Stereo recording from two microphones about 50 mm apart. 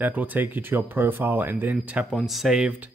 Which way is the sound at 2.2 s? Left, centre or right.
Centre.